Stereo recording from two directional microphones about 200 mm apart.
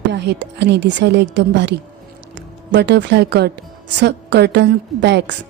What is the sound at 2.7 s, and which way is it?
Speech, 60° right (ahead or behind).